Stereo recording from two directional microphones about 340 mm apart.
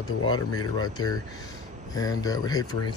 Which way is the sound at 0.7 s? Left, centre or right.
Centre.